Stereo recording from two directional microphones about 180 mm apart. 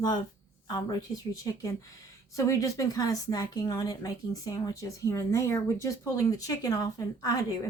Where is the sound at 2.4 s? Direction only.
20° left (ahead or behind).